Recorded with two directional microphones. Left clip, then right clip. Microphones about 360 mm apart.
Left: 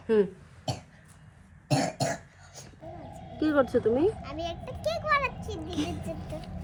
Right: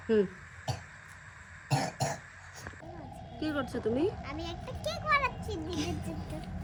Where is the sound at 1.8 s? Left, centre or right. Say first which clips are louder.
Left 5 dB; centre.